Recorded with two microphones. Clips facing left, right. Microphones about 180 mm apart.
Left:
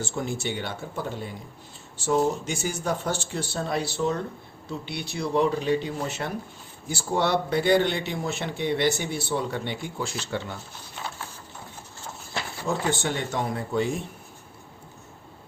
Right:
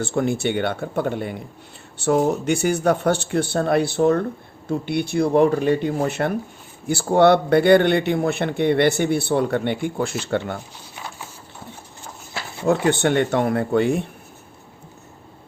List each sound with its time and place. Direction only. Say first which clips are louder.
0.0 s a man's voice: right 8 dB; 60° right (ahead or behind)
12.6 s a man's voice: right 9 dB; 65° right (ahead or behind)